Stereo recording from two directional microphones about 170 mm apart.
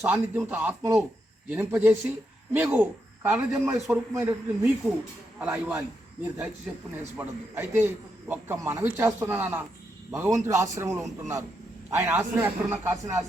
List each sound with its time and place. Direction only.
0.0 s a man's voice: 10° right (ahead or behind)
7.2 s a man's voice: 10° right (ahead or behind)